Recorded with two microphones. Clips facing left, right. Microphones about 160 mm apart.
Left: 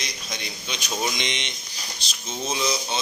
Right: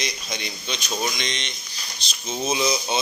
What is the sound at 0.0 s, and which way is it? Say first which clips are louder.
Speech: right 4 dB; centre (ahead or behind).